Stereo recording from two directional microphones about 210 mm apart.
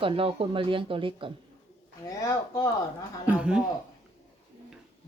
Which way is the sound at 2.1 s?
15° left (ahead or behind).